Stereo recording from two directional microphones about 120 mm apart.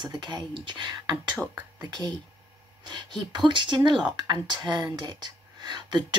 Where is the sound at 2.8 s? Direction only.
40° right (ahead or behind).